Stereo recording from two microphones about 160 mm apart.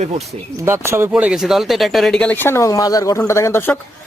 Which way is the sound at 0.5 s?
15° right (ahead or behind).